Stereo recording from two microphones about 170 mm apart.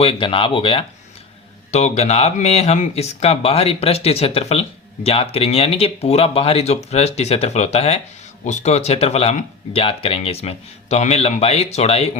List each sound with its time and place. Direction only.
0.0 s speech: 35° left (ahead or behind)